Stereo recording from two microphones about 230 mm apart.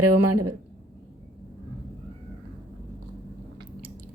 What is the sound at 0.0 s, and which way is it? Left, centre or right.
Speech, right.